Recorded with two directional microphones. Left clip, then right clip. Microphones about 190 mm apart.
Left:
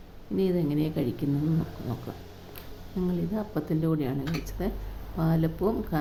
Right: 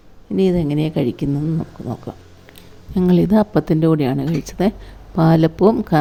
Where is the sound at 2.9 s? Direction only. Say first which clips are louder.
Right 16 dB; 45° right (ahead or behind).